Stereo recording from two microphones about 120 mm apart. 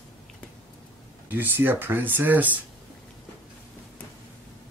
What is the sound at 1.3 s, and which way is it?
Speech, 15° right (ahead or behind).